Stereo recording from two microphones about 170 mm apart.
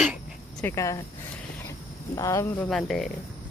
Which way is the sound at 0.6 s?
20° left (ahead or behind).